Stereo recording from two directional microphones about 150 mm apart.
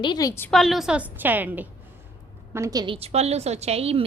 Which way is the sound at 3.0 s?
45° right (ahead or behind).